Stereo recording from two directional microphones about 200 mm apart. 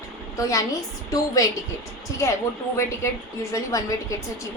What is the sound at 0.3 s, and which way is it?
A woman's voice, 15° left (ahead or behind).